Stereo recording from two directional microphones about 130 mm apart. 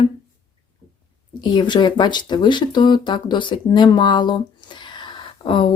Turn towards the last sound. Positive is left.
turn(degrees=40)  # may be behind; listen again after turning